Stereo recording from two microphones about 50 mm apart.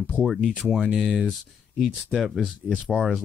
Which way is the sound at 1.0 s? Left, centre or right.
Centre.